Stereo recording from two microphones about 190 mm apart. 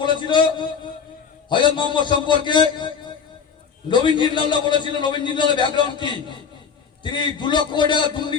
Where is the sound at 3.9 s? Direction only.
25° left (ahead or behind).